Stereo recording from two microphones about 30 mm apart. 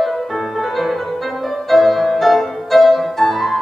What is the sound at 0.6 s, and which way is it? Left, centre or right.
Music, centre.